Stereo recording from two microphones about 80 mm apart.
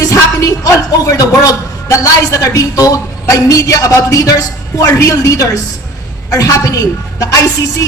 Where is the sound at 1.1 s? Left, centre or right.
Left.